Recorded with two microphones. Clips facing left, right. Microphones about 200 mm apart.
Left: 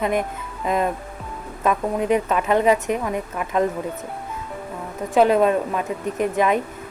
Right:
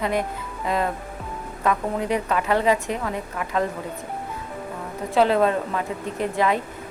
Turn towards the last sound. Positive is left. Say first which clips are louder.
# left 3 dB
turn(degrees=20)  # may be behind; listen again after turning